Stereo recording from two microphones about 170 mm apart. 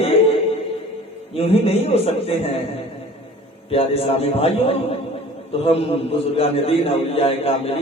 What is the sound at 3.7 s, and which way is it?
A man's voice, 35° left (ahead or behind).